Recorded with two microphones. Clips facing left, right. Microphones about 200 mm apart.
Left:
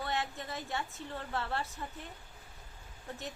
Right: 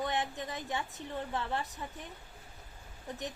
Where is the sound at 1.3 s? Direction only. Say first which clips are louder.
Even; 15° right (ahead or behind).